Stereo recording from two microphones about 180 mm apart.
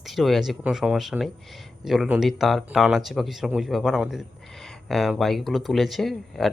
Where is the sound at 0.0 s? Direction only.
Centre (ahead or behind).